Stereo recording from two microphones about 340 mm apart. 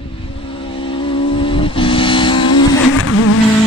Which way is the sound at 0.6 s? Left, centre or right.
Centre.